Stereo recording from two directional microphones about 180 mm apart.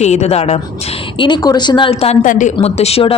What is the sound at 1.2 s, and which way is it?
A woman's voice, 25° left (ahead or behind).